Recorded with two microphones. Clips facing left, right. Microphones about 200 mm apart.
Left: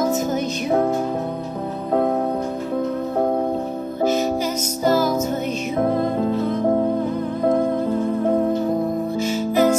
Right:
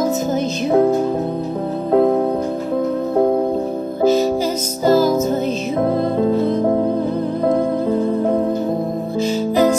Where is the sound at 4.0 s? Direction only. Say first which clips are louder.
Right 5 dB; 30° right (ahead or behind).